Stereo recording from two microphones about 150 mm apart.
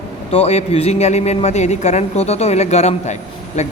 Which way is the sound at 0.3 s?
45° left (ahead or behind).